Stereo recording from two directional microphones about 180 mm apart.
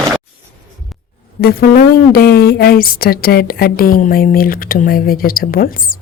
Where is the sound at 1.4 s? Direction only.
60° left (ahead or behind).